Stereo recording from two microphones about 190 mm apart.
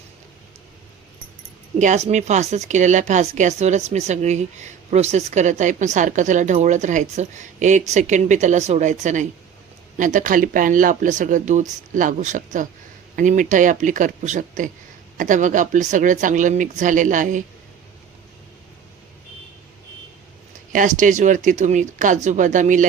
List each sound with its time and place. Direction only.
1.8 s speech: 40° right (ahead or behind)
20.7 s speech: 40° right (ahead or behind)